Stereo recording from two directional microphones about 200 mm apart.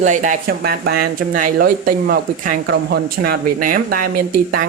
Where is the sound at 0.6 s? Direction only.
50° right (ahead or behind).